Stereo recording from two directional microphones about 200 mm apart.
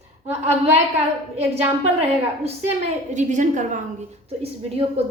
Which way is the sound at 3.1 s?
35° right (ahead or behind).